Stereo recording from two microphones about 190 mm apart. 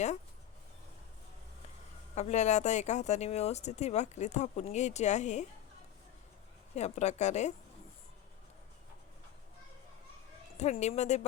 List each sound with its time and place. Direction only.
2.1 s speech: 35° left (ahead or behind)
6.7 s speech: 35° left (ahead or behind)
10.6 s speech: 35° left (ahead or behind)